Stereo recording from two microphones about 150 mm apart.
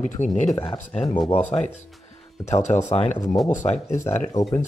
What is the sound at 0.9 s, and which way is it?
Speech, 45° left (ahead or behind).